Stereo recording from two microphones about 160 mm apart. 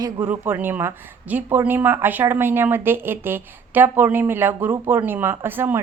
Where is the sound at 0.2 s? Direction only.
10° right (ahead or behind).